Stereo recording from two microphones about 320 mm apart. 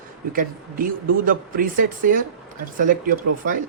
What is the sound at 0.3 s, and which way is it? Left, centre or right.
Speech, right.